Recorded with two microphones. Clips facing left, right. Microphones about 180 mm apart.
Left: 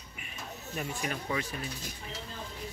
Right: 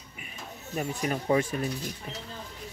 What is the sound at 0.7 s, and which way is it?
Speech, 40° right (ahead or behind).